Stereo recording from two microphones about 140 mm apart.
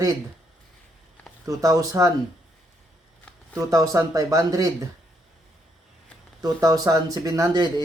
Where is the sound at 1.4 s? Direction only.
25° right (ahead or behind).